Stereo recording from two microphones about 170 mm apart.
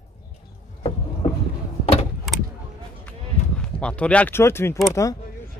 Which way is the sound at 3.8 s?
5° left (ahead or behind).